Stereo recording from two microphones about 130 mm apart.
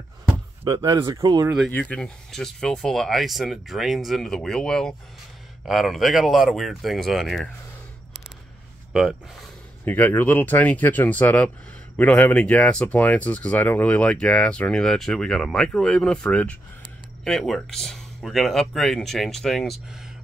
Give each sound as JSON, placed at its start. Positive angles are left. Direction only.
{"t": 0.7, "sound": "speech", "side_deg": -30}
{"t": 1.7, "sound": "speech", "side_deg": 10}
{"t": 8.9, "sound": "speech", "side_deg": -5}
{"t": 9.8, "sound": "speech", "side_deg": 15}